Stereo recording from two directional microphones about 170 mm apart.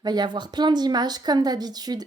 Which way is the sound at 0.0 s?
25° right (ahead or behind).